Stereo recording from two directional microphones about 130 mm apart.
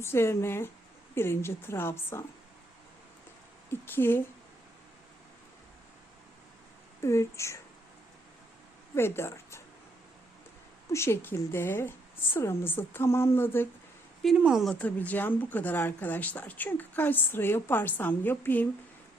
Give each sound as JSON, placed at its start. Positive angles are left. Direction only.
{"t": 0.0, "sound": "a woman's voice", "side_deg": 20}
{"t": 3.7, "sound": "a woman's voice", "side_deg": 15}
{"t": 7.0, "sound": "a woman's voice", "side_deg": 20}
{"t": 9.0, "sound": "a woman's voice", "side_deg": 20}
{"t": 10.9, "sound": "speech", "side_deg": 20}
{"t": 14.2, "sound": "speech", "side_deg": -5}
{"t": 14.7, "sound": "speech", "side_deg": 10}